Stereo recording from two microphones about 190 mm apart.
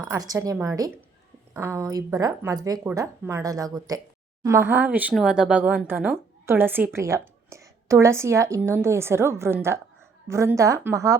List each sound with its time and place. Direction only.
0.0 s speech: 20° right (ahead or behind)